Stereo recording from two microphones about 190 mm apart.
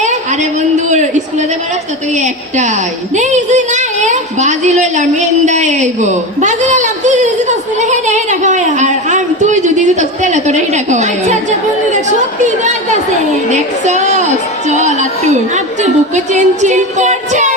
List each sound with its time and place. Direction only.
0.0 s a sound: 40° right (ahead or behind)
2.1 s music: 40° right (ahead or behind)
3.2 s a woman's voice: 40° right (ahead or behind)
12.4 s a woman's voice: 40° right (ahead or behind)
14.8 s music: 40° right (ahead or behind)